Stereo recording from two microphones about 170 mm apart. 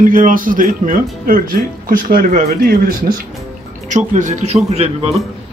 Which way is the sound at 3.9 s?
45° right (ahead or behind).